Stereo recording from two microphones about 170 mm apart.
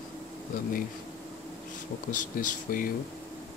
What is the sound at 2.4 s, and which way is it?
Speech, 55° left (ahead or behind).